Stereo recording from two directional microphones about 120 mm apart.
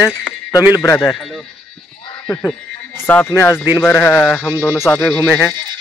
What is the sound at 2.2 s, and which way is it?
Speech, 15° left (ahead or behind).